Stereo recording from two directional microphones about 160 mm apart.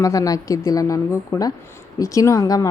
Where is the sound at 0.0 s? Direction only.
20° left (ahead or behind).